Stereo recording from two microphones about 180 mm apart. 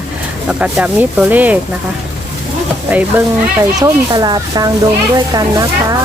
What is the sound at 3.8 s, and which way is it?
Speech, 20° right (ahead or behind).